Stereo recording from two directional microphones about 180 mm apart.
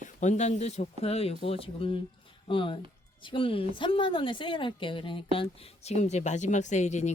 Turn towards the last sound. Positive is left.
turn(degrees=40)  # may be behind; listen again after turning